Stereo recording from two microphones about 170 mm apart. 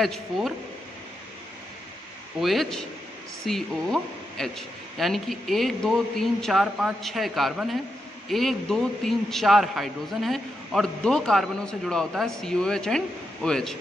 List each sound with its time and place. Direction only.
0.0 s a man's voice: centre (ahead or behind)
2.4 s a man's voice: centre (ahead or behind)